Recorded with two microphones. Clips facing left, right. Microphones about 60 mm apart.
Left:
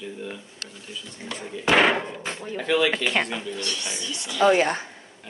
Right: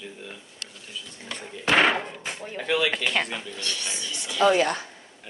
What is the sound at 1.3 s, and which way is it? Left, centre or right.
Speech, centre.